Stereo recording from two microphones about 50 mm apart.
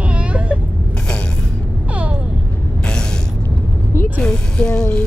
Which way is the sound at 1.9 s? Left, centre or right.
Right.